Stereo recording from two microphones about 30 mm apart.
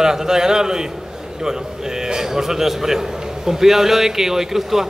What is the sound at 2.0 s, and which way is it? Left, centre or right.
A man's voice, centre.